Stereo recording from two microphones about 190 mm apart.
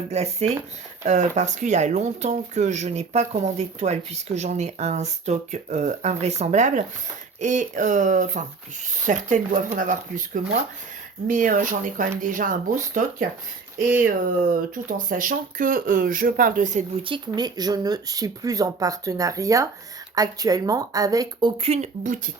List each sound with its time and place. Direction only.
0.1 s speech: 35° right (ahead or behind)
17.0 s speech: 25° right (ahead or behind)
21.6 s speech: 35° right (ahead or behind)